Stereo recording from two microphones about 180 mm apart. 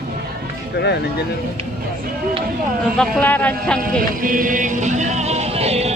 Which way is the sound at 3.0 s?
10° left (ahead or behind).